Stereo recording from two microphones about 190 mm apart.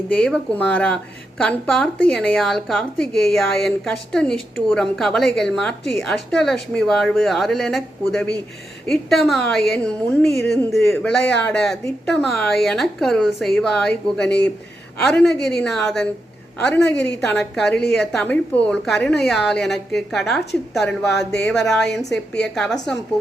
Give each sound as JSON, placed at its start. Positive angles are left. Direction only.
{"t": 0.1, "sound": "speech", "side_deg": 5}
{"t": 16.9, "sound": "a woman's voice", "side_deg": 65}
{"t": 17.2, "sound": "speech", "side_deg": 5}
{"t": 21.3, "sound": "a woman's voice", "side_deg": 65}
{"t": 21.7, "sound": "speech", "side_deg": 0}